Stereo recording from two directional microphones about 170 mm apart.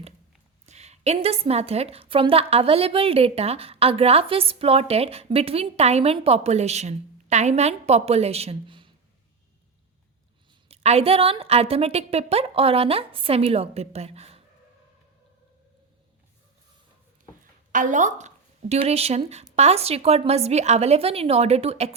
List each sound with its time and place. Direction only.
0.6 s a woman's voice: 40° right (ahead or behind)
10.7 s a woman's voice: 35° right (ahead or behind)
17.7 s a woman's voice: 50° right (ahead or behind)